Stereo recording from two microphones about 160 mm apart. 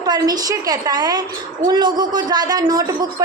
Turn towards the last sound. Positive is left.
turn(degrees=-20)  # may be behind; listen again after turning